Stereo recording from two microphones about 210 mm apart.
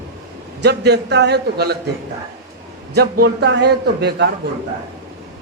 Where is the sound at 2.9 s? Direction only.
50° right (ahead or behind).